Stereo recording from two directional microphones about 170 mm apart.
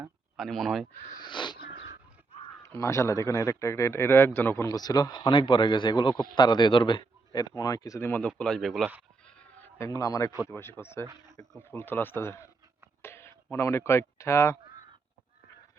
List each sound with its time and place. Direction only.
0.3 s speech: centre (ahead or behind)
1.2 s a sound: 25° left (ahead or behind)
2.6 s speech: 15° left (ahead or behind)
9.2 s cat: 10° left (ahead or behind)
10.5 s speech: 15° left (ahead or behind)